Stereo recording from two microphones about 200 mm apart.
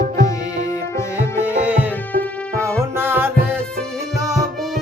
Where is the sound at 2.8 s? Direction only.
10° right (ahead or behind).